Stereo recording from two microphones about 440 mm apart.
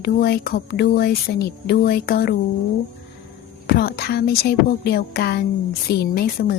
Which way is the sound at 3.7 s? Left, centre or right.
Left.